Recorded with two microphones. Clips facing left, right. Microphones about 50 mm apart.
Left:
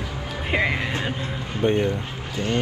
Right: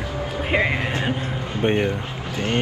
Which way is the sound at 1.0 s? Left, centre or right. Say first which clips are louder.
Right 3 dB; right.